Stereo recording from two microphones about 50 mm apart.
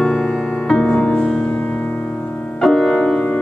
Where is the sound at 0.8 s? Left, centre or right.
Left.